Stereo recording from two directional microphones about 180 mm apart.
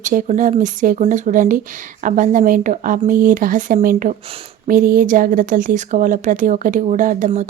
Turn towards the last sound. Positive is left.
turn(degrees=-45)  # may be behind; listen again after turning